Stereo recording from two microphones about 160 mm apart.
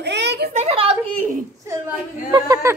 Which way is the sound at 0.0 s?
90° right.